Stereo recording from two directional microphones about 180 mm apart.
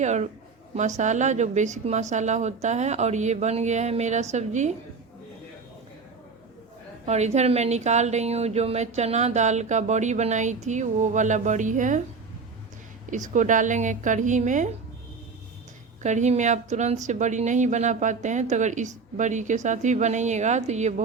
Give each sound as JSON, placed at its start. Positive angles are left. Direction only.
{"t": 0.0, "sound": "a woman's voice", "side_deg": -40}
{"t": 7.0, "sound": "a woman's voice", "side_deg": -40}
{"t": 13.1, "sound": "speech", "side_deg": -45}
{"t": 16.0, "sound": "a woman's voice", "side_deg": -40}